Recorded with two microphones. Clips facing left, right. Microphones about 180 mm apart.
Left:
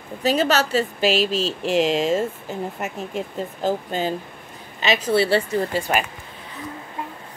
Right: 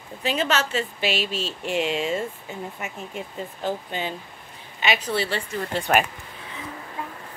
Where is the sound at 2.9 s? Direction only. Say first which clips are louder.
Left 5 dB; 40° left (ahead or behind).